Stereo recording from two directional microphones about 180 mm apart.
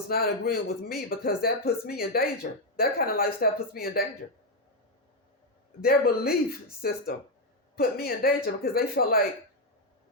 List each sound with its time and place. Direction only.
0.1 s speech: 55° left (ahead or behind)
5.8 s speech: 55° left (ahead or behind)